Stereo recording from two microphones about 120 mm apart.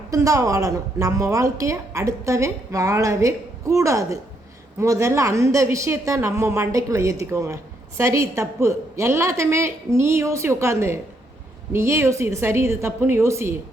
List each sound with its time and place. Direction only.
0.1 s a woman's voice: 25° right (ahead or behind)